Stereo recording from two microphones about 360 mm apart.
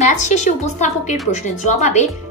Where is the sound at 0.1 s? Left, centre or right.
Centre.